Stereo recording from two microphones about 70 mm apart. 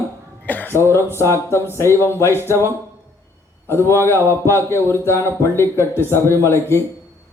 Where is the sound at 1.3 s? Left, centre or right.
Left.